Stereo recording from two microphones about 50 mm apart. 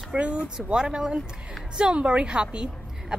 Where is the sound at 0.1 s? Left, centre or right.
Right.